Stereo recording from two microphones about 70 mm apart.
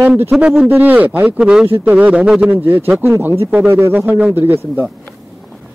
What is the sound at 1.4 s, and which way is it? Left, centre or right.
Speech, centre.